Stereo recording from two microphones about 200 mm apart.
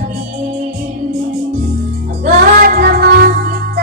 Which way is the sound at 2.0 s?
40° right (ahead or behind).